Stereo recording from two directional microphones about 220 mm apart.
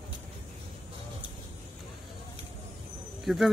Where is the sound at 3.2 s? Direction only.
Centre (ahead or behind).